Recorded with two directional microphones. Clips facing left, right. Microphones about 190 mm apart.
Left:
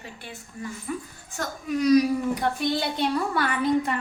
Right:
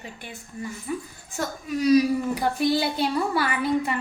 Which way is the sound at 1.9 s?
5° right (ahead or behind).